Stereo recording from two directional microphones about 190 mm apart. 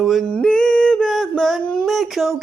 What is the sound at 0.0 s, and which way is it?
Singing, centre (ahead or behind).